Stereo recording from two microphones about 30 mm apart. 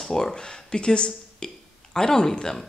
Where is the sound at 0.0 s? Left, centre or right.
Centre.